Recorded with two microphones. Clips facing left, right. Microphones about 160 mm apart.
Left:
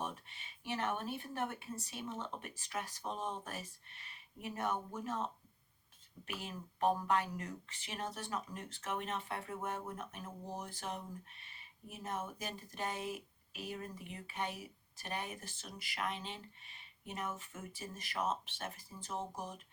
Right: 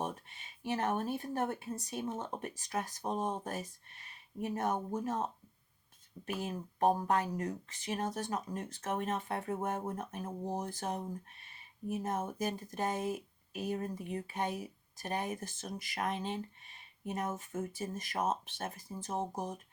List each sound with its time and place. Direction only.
0.0 s speech: 45° right (ahead or behind)